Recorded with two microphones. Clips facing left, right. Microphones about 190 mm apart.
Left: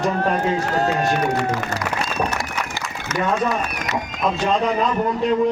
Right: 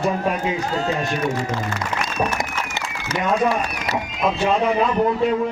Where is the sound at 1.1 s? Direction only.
70° left (ahead or behind).